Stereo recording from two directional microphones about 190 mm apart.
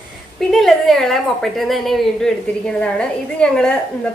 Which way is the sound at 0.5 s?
Centre (ahead or behind).